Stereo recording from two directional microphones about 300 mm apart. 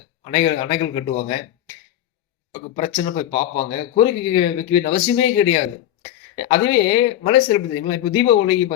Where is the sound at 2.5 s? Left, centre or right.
Centre.